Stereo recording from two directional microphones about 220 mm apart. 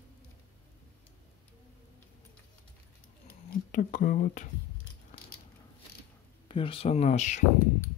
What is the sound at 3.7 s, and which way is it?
Speech, 35° left (ahead or behind).